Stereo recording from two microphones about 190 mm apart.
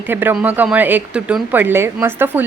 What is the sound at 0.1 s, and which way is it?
Speech, 10° right (ahead or behind).